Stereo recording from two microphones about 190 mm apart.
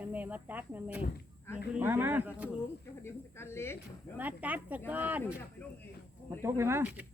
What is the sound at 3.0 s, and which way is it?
Speech, 15° left (ahead or behind).